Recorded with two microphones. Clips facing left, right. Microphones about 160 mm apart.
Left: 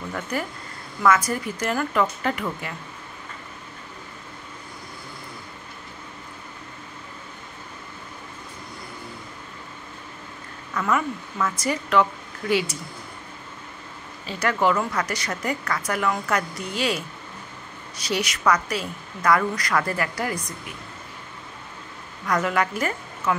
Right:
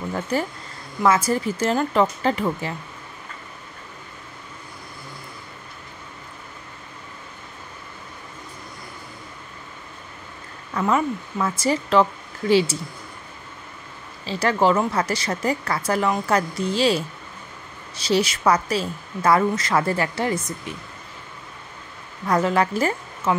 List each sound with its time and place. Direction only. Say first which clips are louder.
0.1 s a woman's voice: right 4 dB; 30° right (ahead or behind)
10.7 s a woman's voice: right 3 dB; 30° right (ahead or behind)
14.2 s a woman's voice: right 3 dB; 30° right (ahead or behind)
22.2 s a woman's voice: right 3 dB; 30° right (ahead or behind)